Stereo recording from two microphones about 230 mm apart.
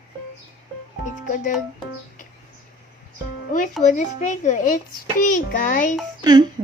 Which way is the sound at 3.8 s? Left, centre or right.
Left.